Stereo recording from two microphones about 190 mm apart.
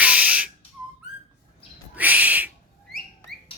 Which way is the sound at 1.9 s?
10° right (ahead or behind).